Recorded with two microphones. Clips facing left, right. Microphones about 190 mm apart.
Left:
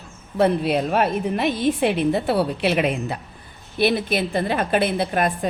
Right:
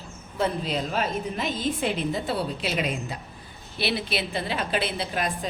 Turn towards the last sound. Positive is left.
turn(degrees=55)  # may be behind; listen again after turning